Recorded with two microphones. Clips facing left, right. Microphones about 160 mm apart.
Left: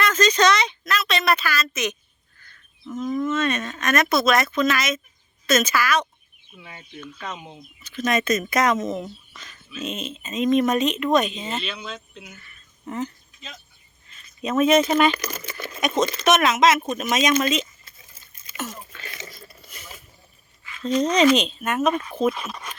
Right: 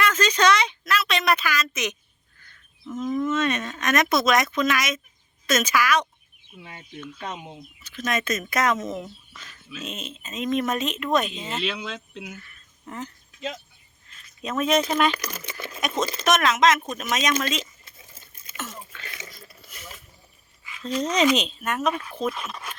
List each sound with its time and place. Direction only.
0.0 s speech: 10° right (ahead or behind)
2.8 s speech: centre (ahead or behind)
3.3 s speech: 15° right (ahead or behind)
7.4 s speech: centre (ahead or behind)
9.3 s a sound: 5° right (ahead or behind)
9.8 s speech: centre (ahead or behind)
11.6 s speech: 90° right
12.4 s a sound: centre (ahead or behind)
14.4 s speech: 5° left (ahead or behind)
18.5 s a sound: 10° left (ahead or behind)
19.5 s a sound: 5° right (ahead or behind)
20.8 s speech: centre (ahead or behind)